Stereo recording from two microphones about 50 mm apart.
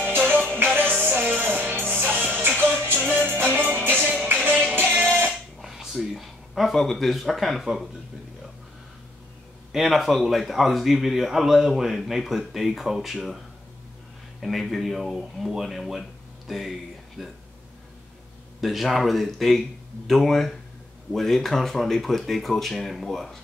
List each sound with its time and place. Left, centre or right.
0.0 s music: right
3.0 s music: right
5.6 s a sound: centre
6.7 s speech: centre
9.7 s a man's voice: centre
14.4 s speech: centre
18.6 s speech: centre